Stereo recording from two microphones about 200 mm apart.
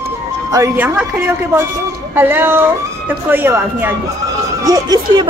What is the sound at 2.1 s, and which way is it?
Speech, 10° right (ahead or behind).